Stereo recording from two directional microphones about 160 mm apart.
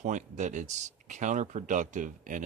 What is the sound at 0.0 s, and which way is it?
Speech, 50° right (ahead or behind).